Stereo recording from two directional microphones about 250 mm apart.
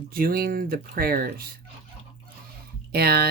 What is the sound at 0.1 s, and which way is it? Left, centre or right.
Speech, right.